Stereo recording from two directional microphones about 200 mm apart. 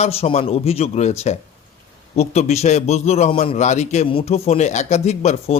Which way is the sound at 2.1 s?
30° left (ahead or behind).